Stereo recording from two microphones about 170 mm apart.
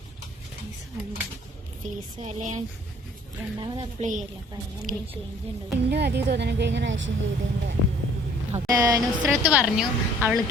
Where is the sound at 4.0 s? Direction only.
45° right (ahead or behind).